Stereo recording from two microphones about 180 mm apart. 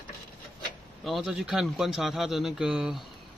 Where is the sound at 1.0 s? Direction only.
Centre (ahead or behind).